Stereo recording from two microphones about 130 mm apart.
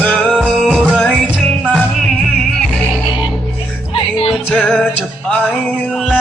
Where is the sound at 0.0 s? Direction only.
10° left (ahead or behind).